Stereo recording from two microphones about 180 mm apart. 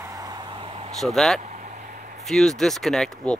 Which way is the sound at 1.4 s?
45° right (ahead or behind).